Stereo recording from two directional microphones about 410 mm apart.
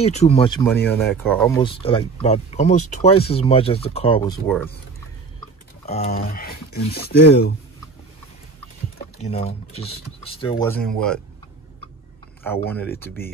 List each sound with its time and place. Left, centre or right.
0.0 s speech: centre
5.9 s speech: centre
9.2 s speech: centre
12.4 s speech: centre